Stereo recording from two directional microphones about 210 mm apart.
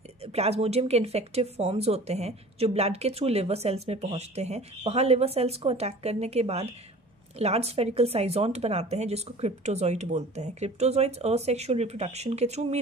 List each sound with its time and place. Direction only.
0.2 s speech: 30° right (ahead or behind)